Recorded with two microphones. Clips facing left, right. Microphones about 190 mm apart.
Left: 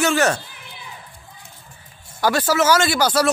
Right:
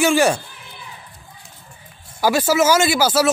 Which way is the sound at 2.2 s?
10° right (ahead or behind).